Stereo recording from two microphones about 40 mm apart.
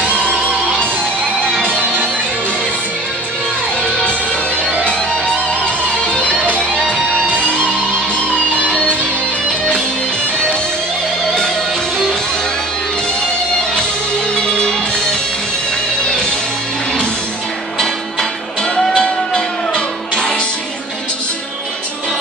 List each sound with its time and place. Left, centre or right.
0.0 s music: left
1.6 s music: left
4.8 s music: left
8.2 s music: left
14.4 s music: left
18.9 s music: centre